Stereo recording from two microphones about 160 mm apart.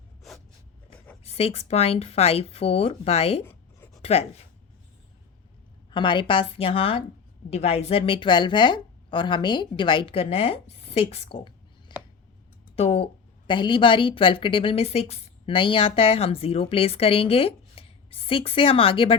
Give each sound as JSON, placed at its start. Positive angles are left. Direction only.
{"t": 1.3, "sound": "a woman's voice", "side_deg": 40}
{"t": 5.9, "sound": "a woman's voice", "side_deg": 30}